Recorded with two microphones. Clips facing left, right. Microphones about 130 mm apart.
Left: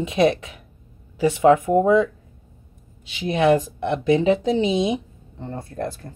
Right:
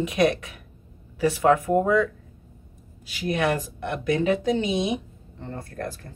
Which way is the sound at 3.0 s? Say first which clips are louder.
Left 6 dB; 25° left (ahead or behind).